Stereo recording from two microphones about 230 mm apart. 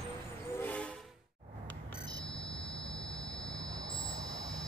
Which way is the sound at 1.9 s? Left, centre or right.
Centre.